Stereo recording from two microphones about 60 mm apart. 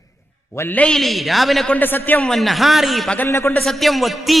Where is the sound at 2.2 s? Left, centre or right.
Centre.